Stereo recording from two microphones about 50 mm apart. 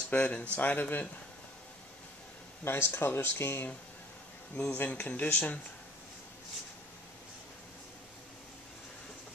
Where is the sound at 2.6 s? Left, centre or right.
Left.